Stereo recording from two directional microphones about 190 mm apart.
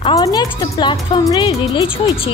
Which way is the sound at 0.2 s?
20° left (ahead or behind).